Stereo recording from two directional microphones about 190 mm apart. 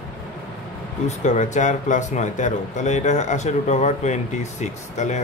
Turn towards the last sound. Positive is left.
turn(degrees=40)  # may be behind; listen again after turning